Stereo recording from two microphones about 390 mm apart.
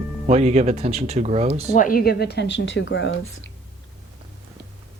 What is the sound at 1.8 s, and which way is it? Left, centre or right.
Speech, left.